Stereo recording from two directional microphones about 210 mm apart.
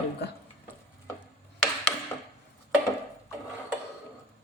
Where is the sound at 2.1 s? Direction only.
10° left (ahead or behind).